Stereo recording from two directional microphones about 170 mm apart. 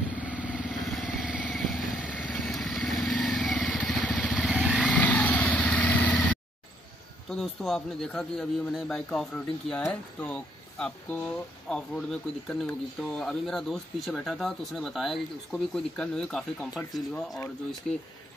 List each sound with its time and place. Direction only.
0.1 s vehicle: 10° right (ahead or behind)
4.6 s vehicle: 5° right (ahead or behind)
4.8 s vehicle: 10° left (ahead or behind)
7.2 s speech: 5° left (ahead or behind)